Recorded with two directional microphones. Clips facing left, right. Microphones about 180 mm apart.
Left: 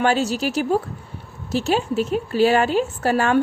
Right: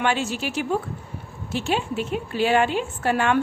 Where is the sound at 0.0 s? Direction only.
40° left (ahead or behind).